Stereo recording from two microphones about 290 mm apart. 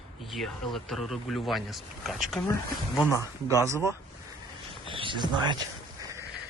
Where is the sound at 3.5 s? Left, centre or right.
Centre.